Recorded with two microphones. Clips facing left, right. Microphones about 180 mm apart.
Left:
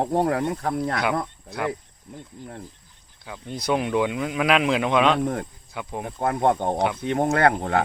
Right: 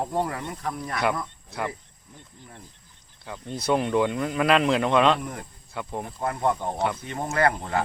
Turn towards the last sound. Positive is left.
turn(degrees=65)  # may be behind; listen again after turning